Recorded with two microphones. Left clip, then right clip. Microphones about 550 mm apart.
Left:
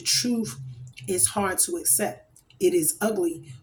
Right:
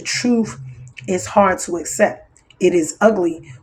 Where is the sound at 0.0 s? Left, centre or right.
Left.